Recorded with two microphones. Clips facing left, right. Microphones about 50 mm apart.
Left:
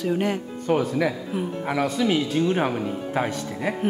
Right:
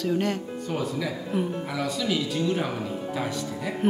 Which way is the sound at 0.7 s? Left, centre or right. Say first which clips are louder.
Left 8 dB; left.